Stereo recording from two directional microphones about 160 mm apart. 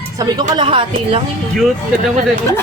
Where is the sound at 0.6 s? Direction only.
35° right (ahead or behind).